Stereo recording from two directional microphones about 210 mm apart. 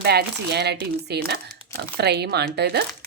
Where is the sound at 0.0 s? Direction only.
50° right (ahead or behind).